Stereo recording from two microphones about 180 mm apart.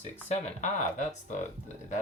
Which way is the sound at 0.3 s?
40° left (ahead or behind).